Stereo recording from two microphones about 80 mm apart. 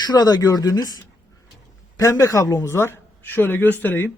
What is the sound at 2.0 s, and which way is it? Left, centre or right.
Speech, left.